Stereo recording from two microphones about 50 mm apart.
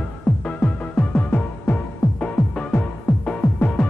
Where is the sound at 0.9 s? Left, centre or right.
Left.